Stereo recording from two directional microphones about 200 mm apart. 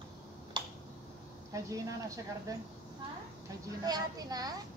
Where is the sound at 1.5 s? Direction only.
15° right (ahead or behind).